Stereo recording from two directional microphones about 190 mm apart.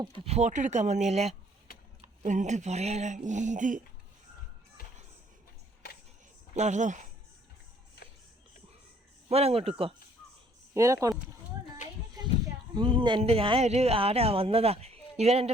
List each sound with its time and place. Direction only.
0.0 s speech: 30° right (ahead or behind)
4.8 s music: 50° left (ahead or behind)
6.6 s speech: 40° right (ahead or behind)
9.3 s speech: 30° right (ahead or behind)
10.8 s speech: 15° right (ahead or behind)
12.2 s a sound: 20° right (ahead or behind)
12.7 s speech: 25° right (ahead or behind)